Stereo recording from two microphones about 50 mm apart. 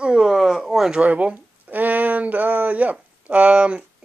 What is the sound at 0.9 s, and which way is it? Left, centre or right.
Speech, right.